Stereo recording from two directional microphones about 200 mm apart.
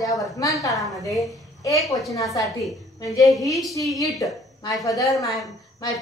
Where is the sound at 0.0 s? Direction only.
15° left (ahead or behind).